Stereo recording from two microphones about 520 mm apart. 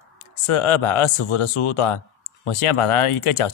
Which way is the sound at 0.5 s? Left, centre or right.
Left.